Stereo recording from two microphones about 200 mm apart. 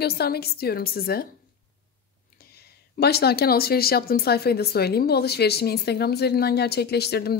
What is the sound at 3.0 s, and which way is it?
Speech, 55° left (ahead or behind).